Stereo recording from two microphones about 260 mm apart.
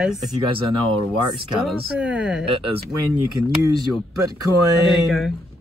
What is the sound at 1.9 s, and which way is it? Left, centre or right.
Speech, centre.